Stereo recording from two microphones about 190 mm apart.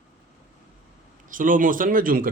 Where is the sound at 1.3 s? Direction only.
45° right (ahead or behind).